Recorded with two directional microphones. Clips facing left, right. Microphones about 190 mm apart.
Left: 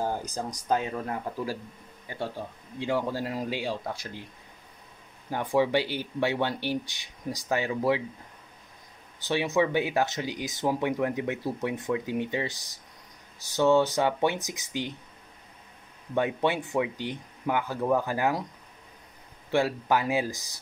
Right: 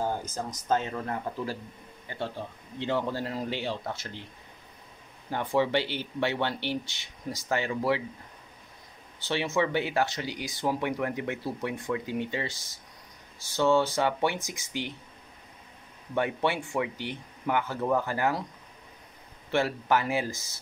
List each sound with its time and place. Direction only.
0.0 s speech: 15° left (ahead or behind)
5.3 s speech: 15° left (ahead or behind)
9.3 s speech: 15° left (ahead or behind)
16.2 s speech: 15° left (ahead or behind)
19.5 s speech: 15° left (ahead or behind)